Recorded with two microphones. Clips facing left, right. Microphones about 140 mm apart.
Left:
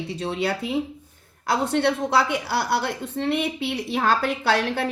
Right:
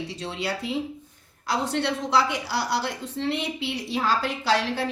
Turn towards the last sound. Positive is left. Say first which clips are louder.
# left 2 dB
turn(degrees=55)  # may be behind; listen again after turning